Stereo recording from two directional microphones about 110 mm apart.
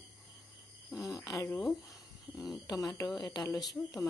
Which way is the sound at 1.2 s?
30° left (ahead or behind).